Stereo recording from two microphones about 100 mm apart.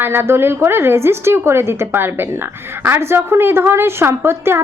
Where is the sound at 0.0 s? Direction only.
20° right (ahead or behind).